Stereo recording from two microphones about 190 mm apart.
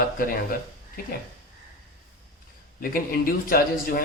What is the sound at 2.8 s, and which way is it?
Speech, 50° left (ahead or behind).